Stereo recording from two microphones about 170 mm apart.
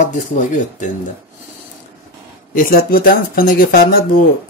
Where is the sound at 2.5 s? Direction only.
55° left (ahead or behind).